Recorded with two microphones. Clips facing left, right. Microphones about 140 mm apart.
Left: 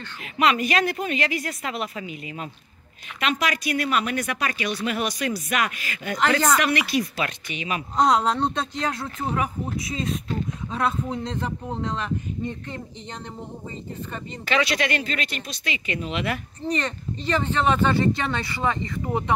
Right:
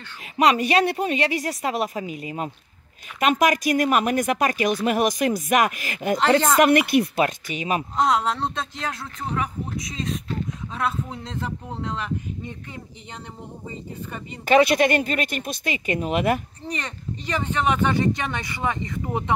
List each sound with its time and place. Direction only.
0.4 s speech: 35° right (ahead or behind)
6.1 s speech: 25° right (ahead or behind)
6.6 s speech: 50° right (ahead or behind)
7.9 s speech: centre (ahead or behind)
9.2 s speech: 10° left (ahead or behind); by 12.8 s 5° right (ahead or behind)
14.4 s speech: 50° right (ahead or behind)
16.6 s speech: 10° right (ahead or behind)